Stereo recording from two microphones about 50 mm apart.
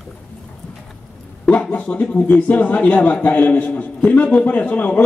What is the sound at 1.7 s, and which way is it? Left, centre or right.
A man's voice, left.